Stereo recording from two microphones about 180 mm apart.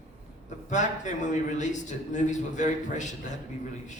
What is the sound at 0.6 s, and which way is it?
A man's voice, 45° left (ahead or behind).